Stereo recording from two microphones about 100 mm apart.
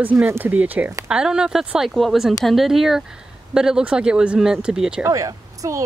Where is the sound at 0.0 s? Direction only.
20° right (ahead or behind).